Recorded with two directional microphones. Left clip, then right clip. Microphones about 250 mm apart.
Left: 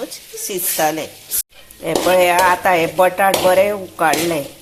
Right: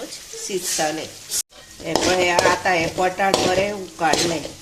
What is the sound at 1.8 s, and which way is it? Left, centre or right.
Speech, centre.